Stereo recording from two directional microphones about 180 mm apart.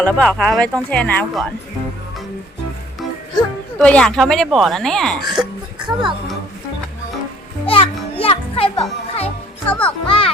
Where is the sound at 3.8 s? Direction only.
5° left (ahead or behind).